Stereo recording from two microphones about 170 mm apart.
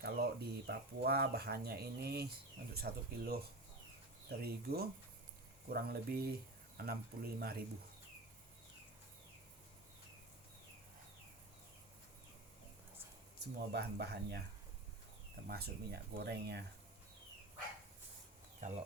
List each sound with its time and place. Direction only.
0.0 s speech: 70° right (ahead or behind)
13.4 s speech: 75° right (ahead or behind)
15.4 s speech: 70° right (ahead or behind)